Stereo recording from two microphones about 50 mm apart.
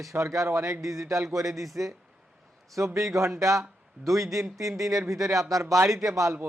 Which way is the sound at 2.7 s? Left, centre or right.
Right.